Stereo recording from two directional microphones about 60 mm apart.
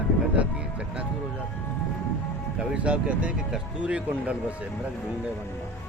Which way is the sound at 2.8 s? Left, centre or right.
Right.